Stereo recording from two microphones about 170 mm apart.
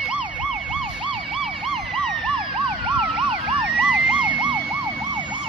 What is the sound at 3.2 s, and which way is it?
Emergency vehicle, 30° right (ahead or behind).